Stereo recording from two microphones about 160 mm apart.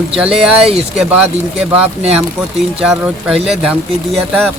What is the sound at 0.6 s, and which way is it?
Speech, 40° right (ahead or behind).